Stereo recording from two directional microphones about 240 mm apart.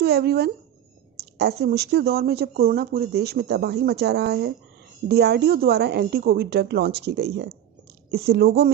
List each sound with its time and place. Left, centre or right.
0.0 s a woman's voice: right